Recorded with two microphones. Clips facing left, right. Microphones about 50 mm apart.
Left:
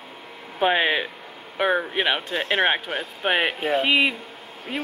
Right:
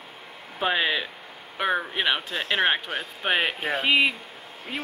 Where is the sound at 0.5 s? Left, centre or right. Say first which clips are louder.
Left 4 dB; left.